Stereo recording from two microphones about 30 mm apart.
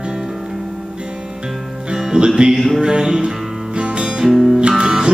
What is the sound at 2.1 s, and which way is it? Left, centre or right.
Music, right.